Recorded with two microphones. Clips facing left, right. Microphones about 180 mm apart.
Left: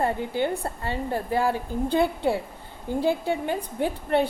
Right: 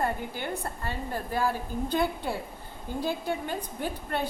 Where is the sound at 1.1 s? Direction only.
20° left (ahead or behind).